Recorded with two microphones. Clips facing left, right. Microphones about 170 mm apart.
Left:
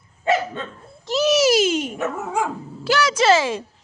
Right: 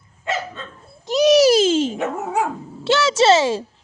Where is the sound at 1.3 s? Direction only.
35° right (ahead or behind).